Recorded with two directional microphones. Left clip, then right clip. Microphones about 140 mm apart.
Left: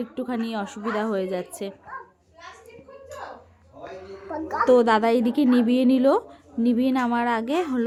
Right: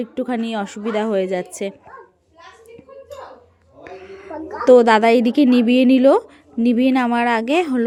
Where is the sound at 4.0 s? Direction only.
30° right (ahead or behind).